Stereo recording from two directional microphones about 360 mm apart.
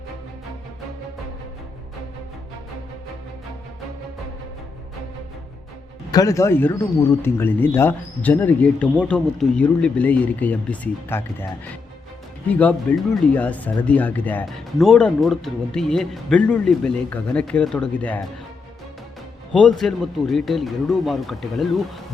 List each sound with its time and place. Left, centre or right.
6.1 s speech: centre
19.5 s speech: centre